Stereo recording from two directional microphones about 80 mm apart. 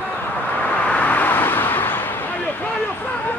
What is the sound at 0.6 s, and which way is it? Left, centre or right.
Vehicle, centre.